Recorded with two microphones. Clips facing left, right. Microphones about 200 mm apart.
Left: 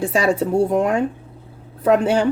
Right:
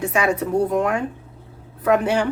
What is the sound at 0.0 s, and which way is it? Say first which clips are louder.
A woman's voice: left 3 dB; 30° left (ahead or behind).